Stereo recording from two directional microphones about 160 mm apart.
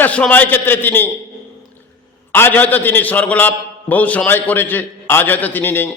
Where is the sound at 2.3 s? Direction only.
10° left (ahead or behind).